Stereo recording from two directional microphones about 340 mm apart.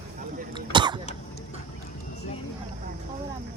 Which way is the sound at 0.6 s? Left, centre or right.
Centre.